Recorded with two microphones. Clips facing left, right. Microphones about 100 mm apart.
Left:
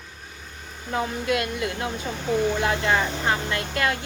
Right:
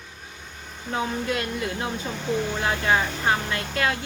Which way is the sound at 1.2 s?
30° right (ahead or behind).